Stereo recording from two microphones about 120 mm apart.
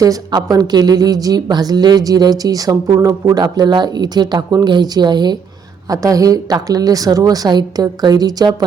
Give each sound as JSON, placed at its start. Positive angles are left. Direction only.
{"t": 0.0, "sound": "a woman's voice", "side_deg": -30}